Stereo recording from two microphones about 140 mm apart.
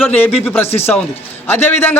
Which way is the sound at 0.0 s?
10° left (ahead or behind).